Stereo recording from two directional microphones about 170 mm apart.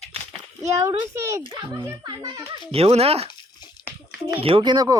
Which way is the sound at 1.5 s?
20° right (ahead or behind).